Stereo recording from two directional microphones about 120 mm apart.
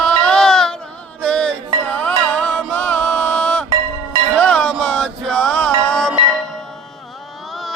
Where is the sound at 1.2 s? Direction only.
10° left (ahead or behind).